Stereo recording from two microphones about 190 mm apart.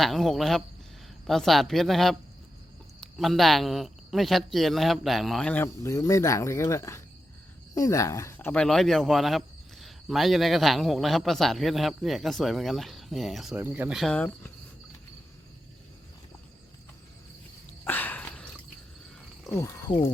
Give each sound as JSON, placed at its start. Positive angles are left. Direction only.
{"t": 0.0, "sound": "speech", "side_deg": 0}
{"t": 14.0, "sound": "speech", "side_deg": 5}
{"t": 17.8, "sound": "a sound", "side_deg": 10}
{"t": 19.5, "sound": "speech", "side_deg": 15}